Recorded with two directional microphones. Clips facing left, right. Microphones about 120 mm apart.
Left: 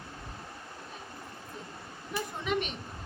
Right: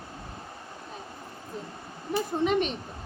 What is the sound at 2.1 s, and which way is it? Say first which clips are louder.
Speech: right 7 dB; 35° right (ahead or behind).